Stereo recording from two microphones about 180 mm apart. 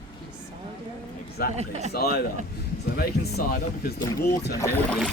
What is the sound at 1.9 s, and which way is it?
Speech, 60° left (ahead or behind).